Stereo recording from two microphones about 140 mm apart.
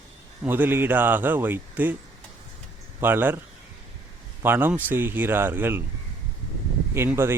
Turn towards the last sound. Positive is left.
turn(degrees=-15)  # may be behind; listen again after turning